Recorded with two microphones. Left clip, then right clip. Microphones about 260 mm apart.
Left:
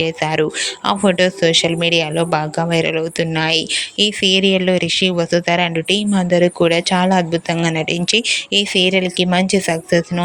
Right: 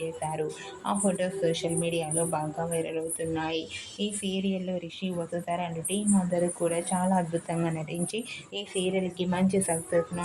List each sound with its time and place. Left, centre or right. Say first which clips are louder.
0.0 s speech: left 14 dB; left